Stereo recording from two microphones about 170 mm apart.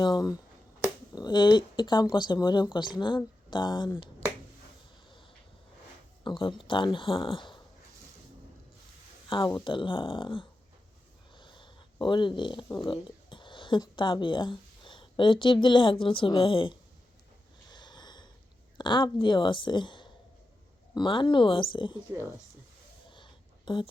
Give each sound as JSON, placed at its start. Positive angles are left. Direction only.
{"t": 0.0, "sound": "speech", "side_deg": 25}
{"t": 6.2, "sound": "speech", "side_deg": 30}
{"t": 9.3, "sound": "speech", "side_deg": 25}
{"t": 11.3, "sound": "a sound", "side_deg": 30}
{"t": 12.8, "sound": "speech", "side_deg": 30}
{"t": 17.7, "sound": "snort", "side_deg": 25}
{"t": 18.8, "sound": "speech", "side_deg": 25}
{"t": 23.1, "sound": "a sound", "side_deg": 30}